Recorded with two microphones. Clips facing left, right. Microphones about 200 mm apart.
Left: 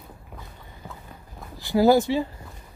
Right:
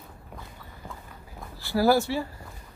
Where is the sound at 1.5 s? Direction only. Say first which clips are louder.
Left 4 dB; 20° left (ahead or behind).